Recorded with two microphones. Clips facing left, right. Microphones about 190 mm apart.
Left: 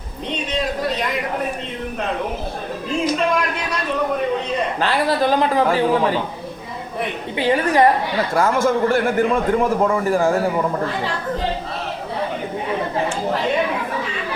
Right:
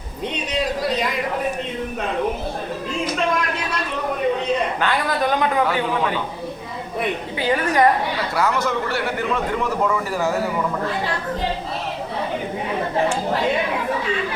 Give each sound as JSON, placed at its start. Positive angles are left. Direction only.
{"t": 4.8, "sound": "speech", "side_deg": 30}
{"t": 7.3, "sound": "a woman's voice", "side_deg": 25}
{"t": 8.3, "sound": "a man's voice", "side_deg": 50}